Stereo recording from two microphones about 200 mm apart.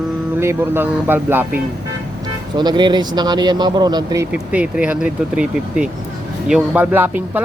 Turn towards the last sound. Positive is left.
turn(degrees=-10)  # may be behind; listen again after turning